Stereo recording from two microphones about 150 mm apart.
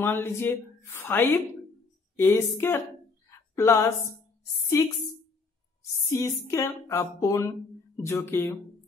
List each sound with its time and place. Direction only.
0.0 s a woman's voice: 15° left (ahead or behind)
3.3 s a sound: 20° left (ahead or behind)
4.7 s speech: 20° left (ahead or behind)
6.0 s a woman's voice: 20° left (ahead or behind)